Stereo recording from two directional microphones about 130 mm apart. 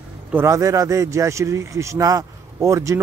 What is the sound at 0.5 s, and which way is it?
Speech, 25° right (ahead or behind).